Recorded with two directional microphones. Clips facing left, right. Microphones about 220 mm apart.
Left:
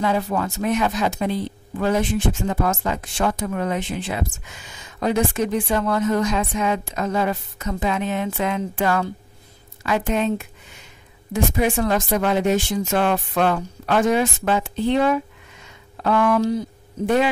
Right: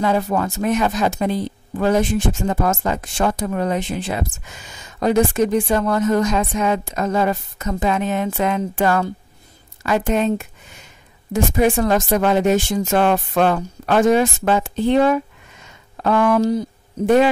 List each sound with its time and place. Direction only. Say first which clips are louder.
0.0 s speech: right 3 dB; 45° right (ahead or behind)